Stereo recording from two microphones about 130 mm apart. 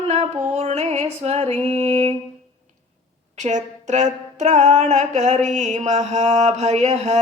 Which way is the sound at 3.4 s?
65° right (ahead or behind).